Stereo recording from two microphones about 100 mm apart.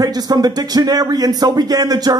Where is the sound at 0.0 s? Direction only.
40° right (ahead or behind).